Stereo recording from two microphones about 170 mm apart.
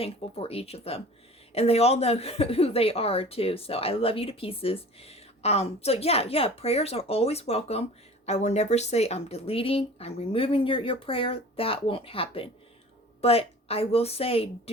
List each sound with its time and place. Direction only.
0.0 s a woman's voice: 35° left (ahead or behind)